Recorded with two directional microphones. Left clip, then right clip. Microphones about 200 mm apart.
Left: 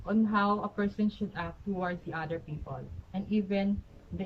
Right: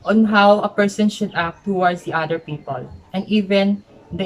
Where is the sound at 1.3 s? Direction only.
15° right (ahead or behind).